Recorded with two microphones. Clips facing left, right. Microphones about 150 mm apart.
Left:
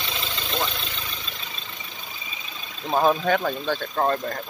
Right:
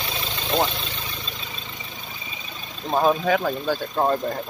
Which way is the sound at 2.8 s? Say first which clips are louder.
Right 1 dB; centre (ahead or behind).